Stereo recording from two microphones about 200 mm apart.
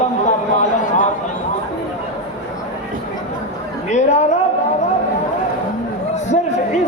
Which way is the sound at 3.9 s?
35° left (ahead or behind).